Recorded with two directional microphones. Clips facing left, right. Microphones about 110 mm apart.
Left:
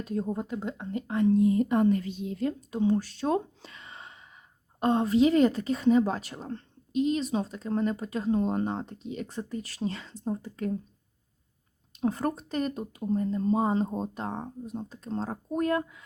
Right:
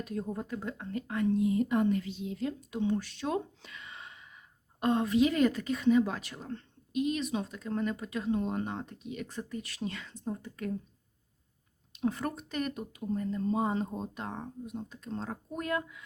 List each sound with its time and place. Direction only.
0.0 s speech: 30° left (ahead or behind)
1.3 s a woman's voice: 40° left (ahead or behind)
11.9 s a woman's voice: 40° left (ahead or behind)